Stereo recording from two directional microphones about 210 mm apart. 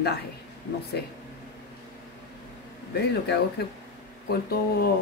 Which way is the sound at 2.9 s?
50° left (ahead or behind).